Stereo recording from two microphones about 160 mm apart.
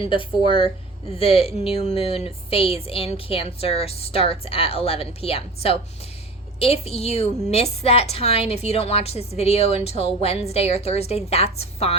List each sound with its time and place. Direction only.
0.0 s a woman's voice: 30° left (ahead or behind)